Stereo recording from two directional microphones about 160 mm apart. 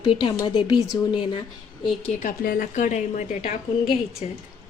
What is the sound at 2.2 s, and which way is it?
A woman's voice, 60° left (ahead or behind).